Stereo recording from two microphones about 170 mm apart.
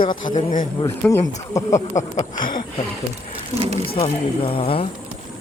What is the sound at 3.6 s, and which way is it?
Speech, 35° right (ahead or behind).